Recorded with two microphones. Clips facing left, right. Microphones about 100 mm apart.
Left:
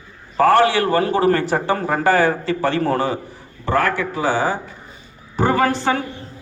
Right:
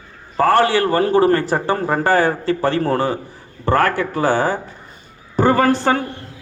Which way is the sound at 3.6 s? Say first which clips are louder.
Right 2 dB; 50° right (ahead or behind).